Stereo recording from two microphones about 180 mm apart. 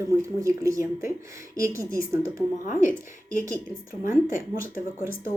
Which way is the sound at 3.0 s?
15° right (ahead or behind).